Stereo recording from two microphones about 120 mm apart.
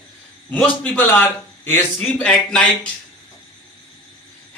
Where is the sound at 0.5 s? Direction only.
15° left (ahead or behind).